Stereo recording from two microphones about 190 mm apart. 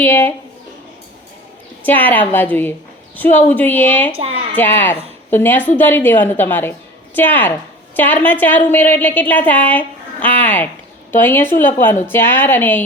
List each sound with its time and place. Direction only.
0.0 s a woman's voice: 10° left (ahead or behind)
1.8 s a woman's voice: 10° left (ahead or behind)
4.1 s a woman's voice: 30° right (ahead or behind)
4.5 s a woman's voice: 10° left (ahead or behind)